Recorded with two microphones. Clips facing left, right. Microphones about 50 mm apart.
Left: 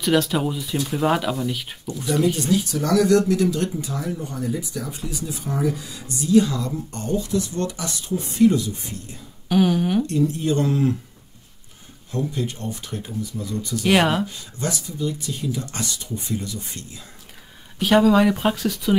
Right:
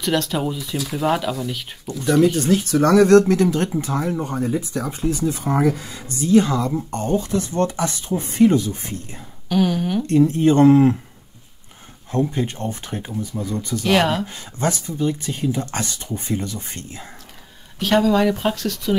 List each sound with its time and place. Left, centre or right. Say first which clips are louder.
0.0 s speech: left 1 dB; centre
2.5 s speech: right 5 dB; right
9.5 s speech: left 1 dB; centre
10.0 s speech: right 6 dB; right
12.1 s speech: right 4 dB; right
13.8 s speech: even; centre
14.2 s speech: right 4 dB; right
17.7 s speech: left 1 dB; centre